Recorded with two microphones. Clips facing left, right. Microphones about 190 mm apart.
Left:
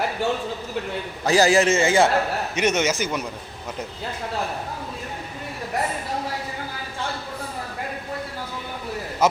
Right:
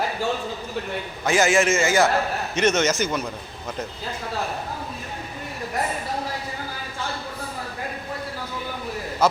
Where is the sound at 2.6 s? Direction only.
15° left (ahead or behind).